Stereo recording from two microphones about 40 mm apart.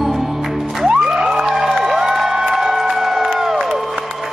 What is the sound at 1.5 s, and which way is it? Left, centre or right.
Crowd, centre.